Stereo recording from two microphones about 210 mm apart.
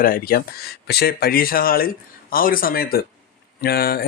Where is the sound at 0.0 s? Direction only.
45° left (ahead or behind).